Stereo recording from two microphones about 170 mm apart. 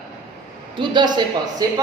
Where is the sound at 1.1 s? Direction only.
20° right (ahead or behind).